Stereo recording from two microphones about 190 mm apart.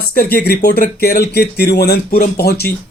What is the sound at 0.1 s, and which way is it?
Speech, 50° left (ahead or behind).